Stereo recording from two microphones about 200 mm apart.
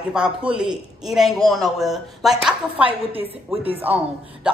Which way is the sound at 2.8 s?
25° right (ahead or behind).